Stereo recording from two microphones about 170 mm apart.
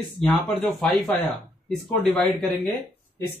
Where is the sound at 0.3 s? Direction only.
Centre (ahead or behind).